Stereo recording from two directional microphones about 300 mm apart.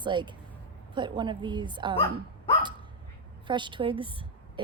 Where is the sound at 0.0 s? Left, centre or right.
Centre.